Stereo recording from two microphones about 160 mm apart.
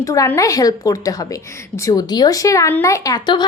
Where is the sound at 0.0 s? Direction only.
20° left (ahead or behind).